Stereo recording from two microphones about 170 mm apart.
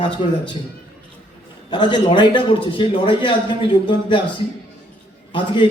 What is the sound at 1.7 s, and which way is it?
A man's voice, 30° left (ahead or behind).